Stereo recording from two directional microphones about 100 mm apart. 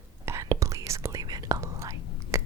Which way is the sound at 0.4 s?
35° right (ahead or behind).